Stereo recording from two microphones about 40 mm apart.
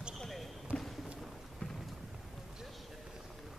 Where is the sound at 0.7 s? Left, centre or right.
Right.